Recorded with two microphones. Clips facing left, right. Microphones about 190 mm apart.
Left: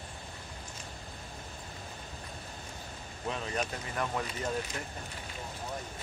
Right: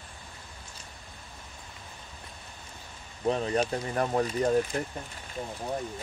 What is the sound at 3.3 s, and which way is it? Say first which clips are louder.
Speech: right 8 dB; 35° right (ahead or behind).